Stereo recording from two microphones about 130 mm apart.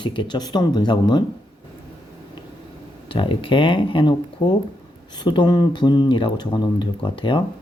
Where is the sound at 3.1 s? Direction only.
40° left (ahead or behind).